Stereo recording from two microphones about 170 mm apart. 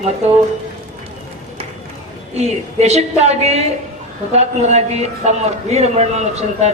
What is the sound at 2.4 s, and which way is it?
A man's voice, 40° right (ahead or behind).